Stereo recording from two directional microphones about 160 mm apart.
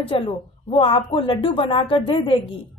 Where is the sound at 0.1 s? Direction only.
35° left (ahead or behind).